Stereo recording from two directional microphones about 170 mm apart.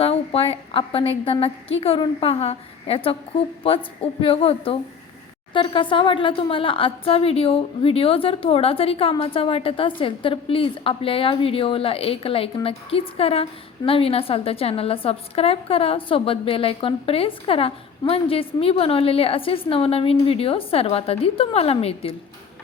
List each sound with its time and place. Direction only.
0.0 s speech: 35° left (ahead or behind)